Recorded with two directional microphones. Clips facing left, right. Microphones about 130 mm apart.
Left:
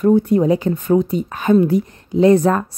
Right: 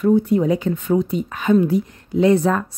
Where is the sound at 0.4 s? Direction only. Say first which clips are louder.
Left 3 dB; 40° left (ahead or behind).